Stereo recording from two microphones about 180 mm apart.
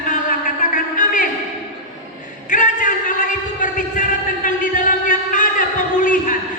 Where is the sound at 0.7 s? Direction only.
45° left (ahead or behind).